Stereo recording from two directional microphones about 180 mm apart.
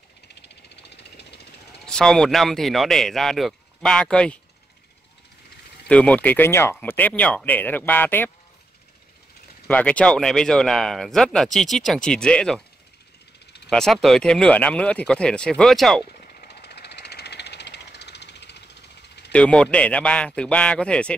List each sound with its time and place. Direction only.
0.3 s vehicle: 70° left (ahead or behind)
1.9 s speech: 5° left (ahead or behind)
5.9 s speech: 5° left (ahead or behind)
9.7 s speech: 5° left (ahead or behind)
13.7 s speech: 5° left (ahead or behind)
16.1 s a sound: 55° left (ahead or behind)
19.3 s speech: 5° left (ahead or behind)